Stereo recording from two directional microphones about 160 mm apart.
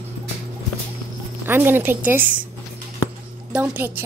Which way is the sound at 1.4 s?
10° right (ahead or behind).